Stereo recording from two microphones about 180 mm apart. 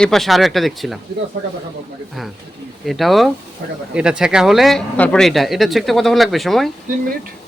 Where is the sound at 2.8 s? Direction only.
Centre (ahead or behind).